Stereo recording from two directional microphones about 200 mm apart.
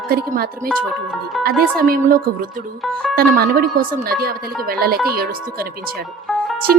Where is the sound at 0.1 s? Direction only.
50° right (ahead or behind).